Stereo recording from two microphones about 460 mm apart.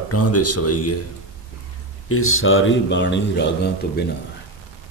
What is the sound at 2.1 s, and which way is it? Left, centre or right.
A man's voice, left.